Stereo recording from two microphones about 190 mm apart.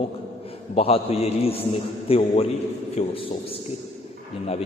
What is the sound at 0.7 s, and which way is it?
A man's voice, 30° left (ahead or behind).